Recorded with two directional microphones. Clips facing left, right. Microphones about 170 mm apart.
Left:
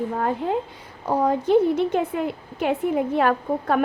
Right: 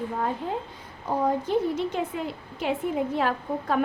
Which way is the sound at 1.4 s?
55° left (ahead or behind).